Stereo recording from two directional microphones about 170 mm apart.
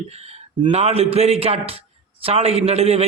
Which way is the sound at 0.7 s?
40° right (ahead or behind).